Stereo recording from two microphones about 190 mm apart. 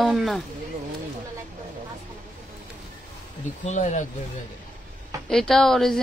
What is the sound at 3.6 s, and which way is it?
Speech, 40° left (ahead or behind).